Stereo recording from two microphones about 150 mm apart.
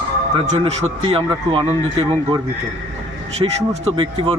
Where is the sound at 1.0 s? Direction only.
35° right (ahead or behind).